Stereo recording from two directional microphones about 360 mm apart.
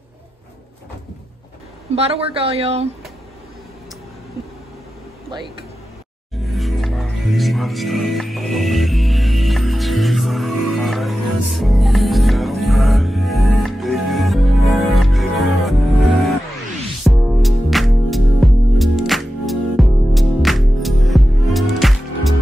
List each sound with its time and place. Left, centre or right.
2.0 s speech: centre
6.5 s music: centre
17.0 s music: centre